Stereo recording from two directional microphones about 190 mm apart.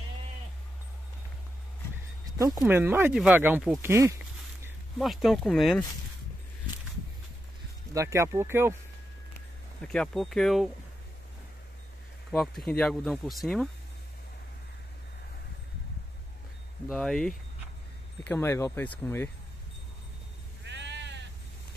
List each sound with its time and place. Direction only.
2.3 s speech: 15° right (ahead or behind)
3.9 s speech: 15° right (ahead or behind)
4.9 s speech: centre (ahead or behind)
7.9 s speech: 15° right (ahead or behind)
9.8 s speech: 5° left (ahead or behind)
12.3 s speech: centre (ahead or behind)
16.9 s speech: 5° left (ahead or behind)
20.6 s sheep: 65° right (ahead or behind)